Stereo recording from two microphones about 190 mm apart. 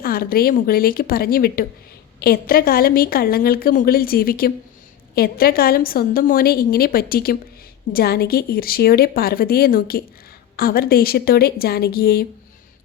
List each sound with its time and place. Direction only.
0.0 s a woman's voice: 50° left (ahead or behind)